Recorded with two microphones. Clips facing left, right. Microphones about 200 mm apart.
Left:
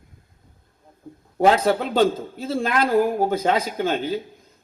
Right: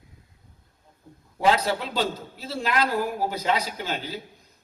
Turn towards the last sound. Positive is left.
turn(degrees=50)  # may be behind; listen again after turning